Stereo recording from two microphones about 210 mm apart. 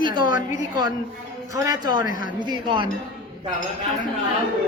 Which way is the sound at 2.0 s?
40° left (ahead or behind).